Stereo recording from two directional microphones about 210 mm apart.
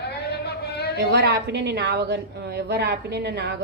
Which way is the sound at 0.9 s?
55° right (ahead or behind).